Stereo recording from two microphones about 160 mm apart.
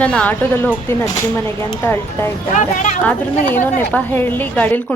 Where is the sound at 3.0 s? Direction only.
10° left (ahead or behind).